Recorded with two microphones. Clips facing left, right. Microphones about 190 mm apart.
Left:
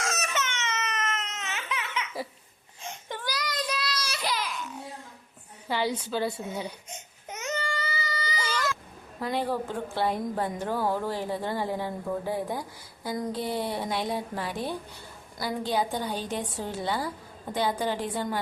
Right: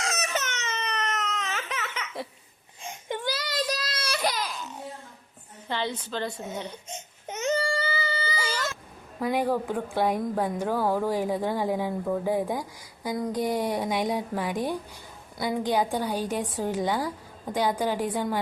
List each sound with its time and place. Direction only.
0.3 s baby cry: 40° right (ahead or behind)
3.1 s child singing: 20° right (ahead or behind)
3.8 s baby cry: 50° right (ahead or behind); by 4.7 s 35° right (ahead or behind)
5.6 s a woman's voice: 10° left (ahead or behind)
6.9 s baby cry: 25° right (ahead or behind)
9.2 s a woman's voice: 10° right (ahead or behind)